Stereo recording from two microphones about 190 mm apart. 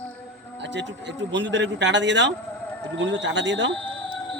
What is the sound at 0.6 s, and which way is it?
Speech, 70° right (ahead or behind).